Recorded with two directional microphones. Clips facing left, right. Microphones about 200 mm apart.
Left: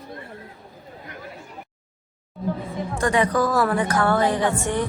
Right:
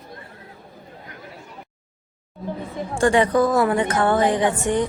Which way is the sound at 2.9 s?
30° right (ahead or behind).